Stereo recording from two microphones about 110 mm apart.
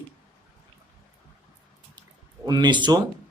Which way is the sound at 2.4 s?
40° right (ahead or behind).